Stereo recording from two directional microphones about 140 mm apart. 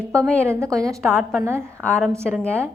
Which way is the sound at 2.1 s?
15° right (ahead or behind).